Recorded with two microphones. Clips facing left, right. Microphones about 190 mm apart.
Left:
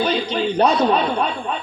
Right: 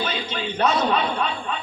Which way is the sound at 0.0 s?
35° left (ahead or behind).